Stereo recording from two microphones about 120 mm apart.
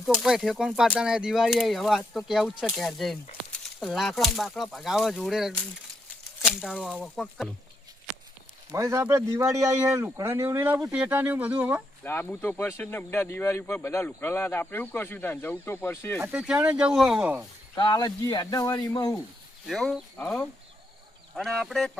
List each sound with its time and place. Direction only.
0.0 s speech: centre (ahead or behind)
8.7 s a man's voice: 25° right (ahead or behind)
10.9 s speech: 15° right (ahead or behind)
12.0 s speech: 20° left (ahead or behind)
16.2 s speech: 10° right (ahead or behind)
17.7 s speech: 35° left (ahead or behind)
19.6 s speech: centre (ahead or behind)